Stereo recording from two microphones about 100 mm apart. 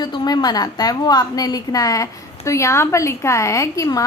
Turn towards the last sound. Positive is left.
turn(degrees=35)  # may be behind; listen again after turning